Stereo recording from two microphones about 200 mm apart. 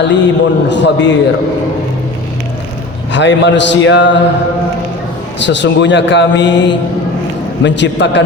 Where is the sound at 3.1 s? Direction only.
65° left (ahead or behind).